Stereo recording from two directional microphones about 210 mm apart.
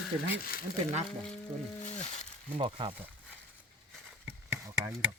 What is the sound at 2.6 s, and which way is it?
Speech, 25° right (ahead or behind).